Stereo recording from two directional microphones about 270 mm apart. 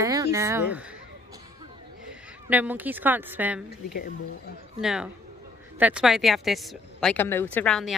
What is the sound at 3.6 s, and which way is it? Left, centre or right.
Speech, left.